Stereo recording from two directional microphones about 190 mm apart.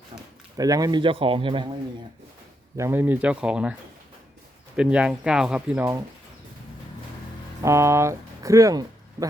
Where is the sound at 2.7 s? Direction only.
15° right (ahead or behind).